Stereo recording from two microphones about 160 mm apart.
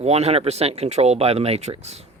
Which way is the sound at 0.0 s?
40° right (ahead or behind).